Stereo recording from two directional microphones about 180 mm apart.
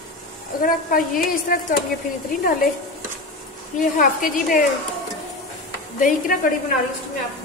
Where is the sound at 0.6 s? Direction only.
50° left (ahead or behind).